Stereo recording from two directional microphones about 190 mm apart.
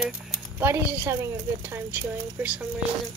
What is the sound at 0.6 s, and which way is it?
Speech, 10° right (ahead or behind).